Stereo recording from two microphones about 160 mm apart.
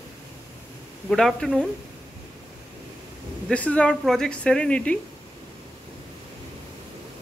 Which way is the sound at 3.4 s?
10° left (ahead or behind).